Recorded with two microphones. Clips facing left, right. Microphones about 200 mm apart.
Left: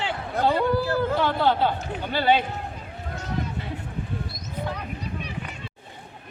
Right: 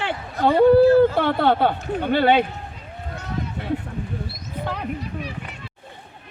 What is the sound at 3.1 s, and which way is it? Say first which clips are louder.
Run: even; 60° right (ahead or behind).